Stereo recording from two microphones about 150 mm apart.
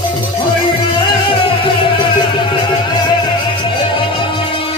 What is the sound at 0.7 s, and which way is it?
Music, 30° left (ahead or behind).